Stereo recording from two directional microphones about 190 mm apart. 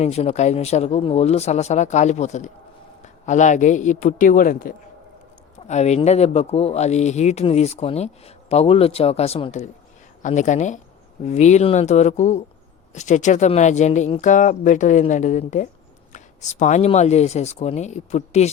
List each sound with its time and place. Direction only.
0.0 s speech: 35° left (ahead or behind)